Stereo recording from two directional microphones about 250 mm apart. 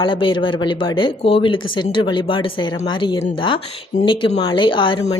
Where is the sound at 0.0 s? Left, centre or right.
Centre.